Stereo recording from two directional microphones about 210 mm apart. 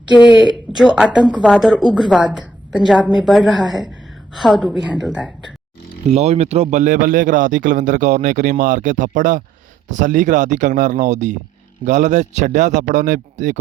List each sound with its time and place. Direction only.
0.1 s speech: 20° left (ahead or behind)
0.4 s speech: centre (ahead or behind)
6.1 s speech: 30° right (ahead or behind)